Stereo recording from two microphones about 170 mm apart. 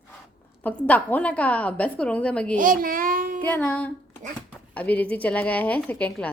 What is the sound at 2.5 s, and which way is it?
Speech, 50° right (ahead or behind).